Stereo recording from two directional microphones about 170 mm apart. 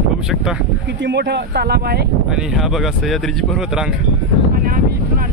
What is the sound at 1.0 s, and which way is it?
Speech, 85° right.